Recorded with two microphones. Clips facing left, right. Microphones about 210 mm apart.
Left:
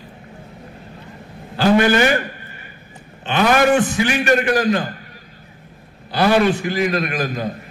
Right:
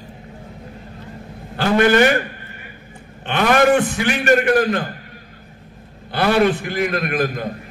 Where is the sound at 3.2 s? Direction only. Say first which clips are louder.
Even; 55° right (ahead or behind).